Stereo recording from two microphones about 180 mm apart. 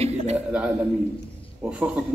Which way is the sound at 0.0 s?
35° right (ahead or behind).